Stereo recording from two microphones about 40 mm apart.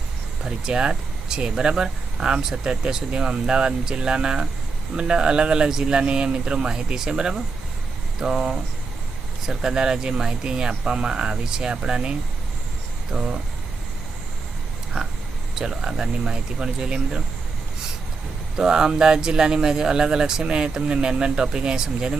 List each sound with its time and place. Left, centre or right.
0.4 s speech: centre
13.1 s speech: centre
15.5 s speech: centre
18.5 s speech: centre